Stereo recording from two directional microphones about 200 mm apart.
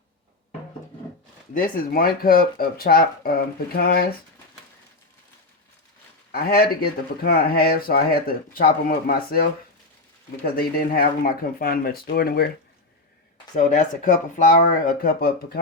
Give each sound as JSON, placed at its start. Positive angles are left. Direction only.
{"t": 1.5, "sound": "speech", "side_deg": 45}
{"t": 6.3, "sound": "speech", "side_deg": 50}
{"t": 13.6, "sound": "speech", "side_deg": 40}